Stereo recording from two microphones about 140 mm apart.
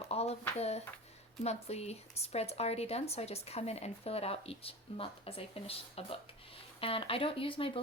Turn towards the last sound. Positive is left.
turn(degrees=40)  # may be behind; listen again after turning